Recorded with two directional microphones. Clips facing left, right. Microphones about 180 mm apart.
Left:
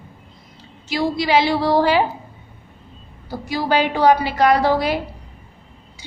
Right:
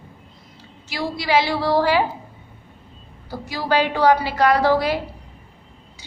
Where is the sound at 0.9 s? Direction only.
20° left (ahead or behind).